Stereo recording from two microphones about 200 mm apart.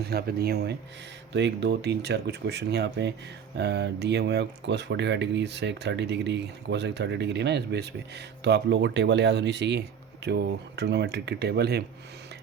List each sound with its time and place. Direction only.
0.1 s speech: 50° right (ahead or behind)